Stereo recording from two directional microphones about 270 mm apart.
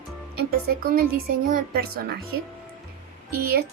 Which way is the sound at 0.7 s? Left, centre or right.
Right.